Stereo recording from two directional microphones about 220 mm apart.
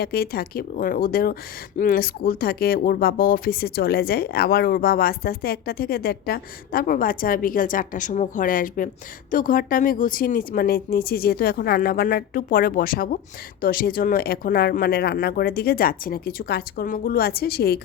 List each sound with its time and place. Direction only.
0.0 s speech: 45° left (ahead or behind)